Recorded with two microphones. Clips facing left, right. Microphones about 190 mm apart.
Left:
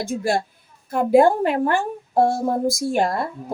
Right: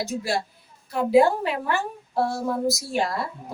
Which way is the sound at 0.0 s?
50° left (ahead or behind).